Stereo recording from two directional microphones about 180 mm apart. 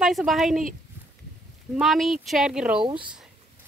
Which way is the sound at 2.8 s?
25° right (ahead or behind).